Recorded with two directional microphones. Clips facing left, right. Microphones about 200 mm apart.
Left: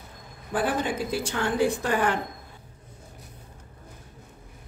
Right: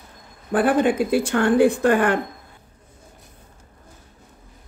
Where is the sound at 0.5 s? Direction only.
55° right (ahead or behind).